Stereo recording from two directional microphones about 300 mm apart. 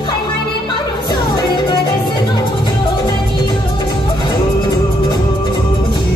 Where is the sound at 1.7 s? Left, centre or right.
Centre.